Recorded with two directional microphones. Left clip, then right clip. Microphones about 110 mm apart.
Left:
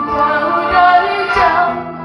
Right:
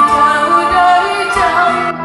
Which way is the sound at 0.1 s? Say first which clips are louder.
Right 4 dB; 15° left (ahead or behind).